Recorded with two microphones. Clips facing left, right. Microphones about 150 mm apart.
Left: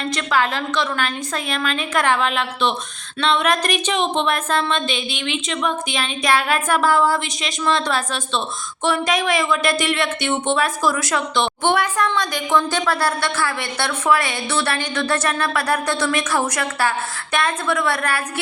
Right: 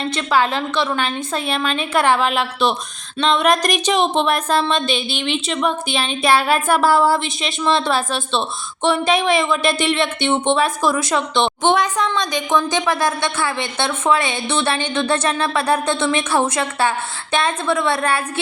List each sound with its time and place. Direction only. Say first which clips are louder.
0.2 s a woman's voice: right 3 dB; 30° right (ahead or behind)